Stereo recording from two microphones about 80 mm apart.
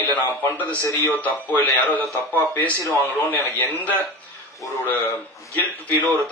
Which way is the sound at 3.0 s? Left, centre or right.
Left.